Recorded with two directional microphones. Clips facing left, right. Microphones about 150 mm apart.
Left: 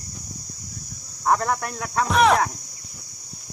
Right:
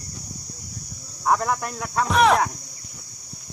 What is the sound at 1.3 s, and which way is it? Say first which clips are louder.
Speech: even; centre (ahead or behind).